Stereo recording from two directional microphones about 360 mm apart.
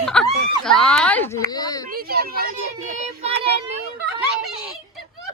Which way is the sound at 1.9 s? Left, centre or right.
Right.